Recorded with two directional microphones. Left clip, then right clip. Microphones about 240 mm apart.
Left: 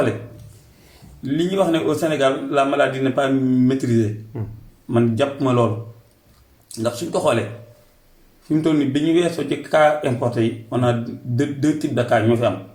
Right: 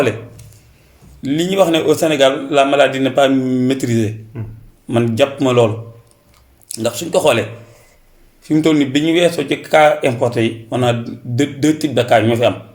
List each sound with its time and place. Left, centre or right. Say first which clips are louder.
1.2 s speech: right 5 dB; right
4.3 s speech: even; left
4.9 s speech: right 4 dB; right
6.7 s speech: right 4 dB; right
8.4 s speech: right 5 dB; right